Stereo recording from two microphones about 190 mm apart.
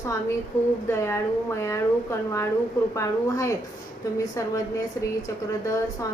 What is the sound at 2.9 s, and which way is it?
Female singing, 15° left (ahead or behind).